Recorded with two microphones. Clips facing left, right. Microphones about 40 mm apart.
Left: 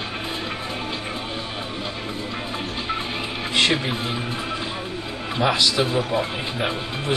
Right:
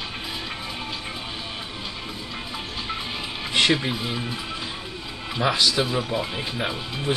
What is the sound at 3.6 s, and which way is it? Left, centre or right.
Speech, centre.